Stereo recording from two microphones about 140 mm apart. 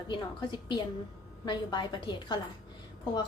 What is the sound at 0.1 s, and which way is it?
A woman's voice, 35° left (ahead or behind).